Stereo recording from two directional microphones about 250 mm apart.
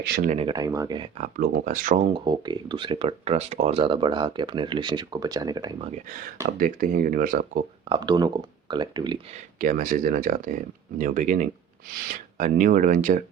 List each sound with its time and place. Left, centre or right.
0.0 s speech: right
0.3 s speech: right
1.2 s speech: right
2.1 s speech: centre
6.6 s speech: right
7.9 s speech: centre
9.6 s speech: right